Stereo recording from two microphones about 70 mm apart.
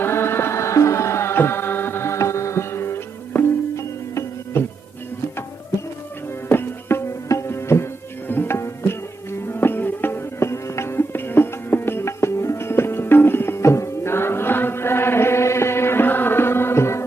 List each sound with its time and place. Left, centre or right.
0.0 s music: left
6.5 s music: left
8.3 s tabla: left
9.5 s music: left